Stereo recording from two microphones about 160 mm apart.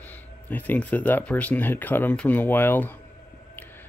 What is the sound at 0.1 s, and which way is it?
Speech, 10° left (ahead or behind).